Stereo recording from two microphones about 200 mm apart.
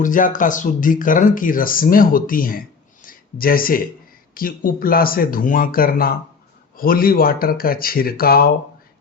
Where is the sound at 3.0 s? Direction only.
45° left (ahead or behind).